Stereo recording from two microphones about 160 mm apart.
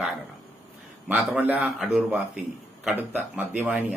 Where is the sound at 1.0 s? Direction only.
10° right (ahead or behind).